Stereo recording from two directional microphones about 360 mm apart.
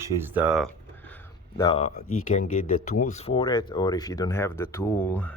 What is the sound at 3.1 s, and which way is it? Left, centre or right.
Speech, centre.